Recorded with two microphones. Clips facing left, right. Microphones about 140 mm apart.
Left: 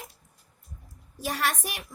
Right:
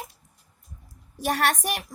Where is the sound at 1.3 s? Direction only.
50° right (ahead or behind).